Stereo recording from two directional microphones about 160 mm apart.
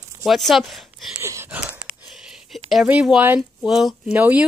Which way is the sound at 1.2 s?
15° right (ahead or behind).